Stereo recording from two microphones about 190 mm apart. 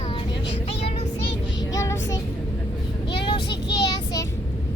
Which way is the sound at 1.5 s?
15° left (ahead or behind).